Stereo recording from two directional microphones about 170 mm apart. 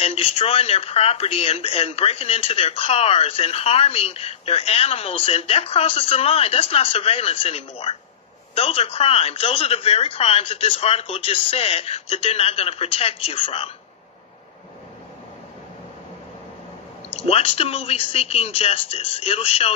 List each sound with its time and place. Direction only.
0.0 s speech: 35° left (ahead or behind)
17.1 s speech: 35° left (ahead or behind)